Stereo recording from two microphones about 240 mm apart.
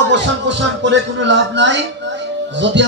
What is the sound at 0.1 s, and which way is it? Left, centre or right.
Speech, right.